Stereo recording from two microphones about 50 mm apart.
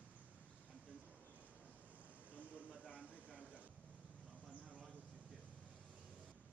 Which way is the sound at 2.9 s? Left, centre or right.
Left.